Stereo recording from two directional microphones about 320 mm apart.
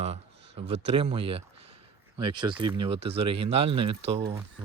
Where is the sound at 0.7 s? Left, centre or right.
Centre.